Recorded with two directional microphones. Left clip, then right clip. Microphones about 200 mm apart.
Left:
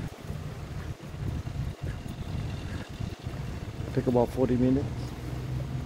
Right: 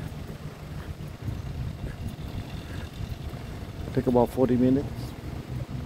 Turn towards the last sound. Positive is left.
turn(degrees=-20)  # may be behind; listen again after turning